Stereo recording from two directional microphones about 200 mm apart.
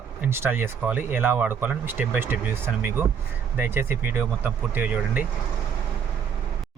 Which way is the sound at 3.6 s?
10° right (ahead or behind).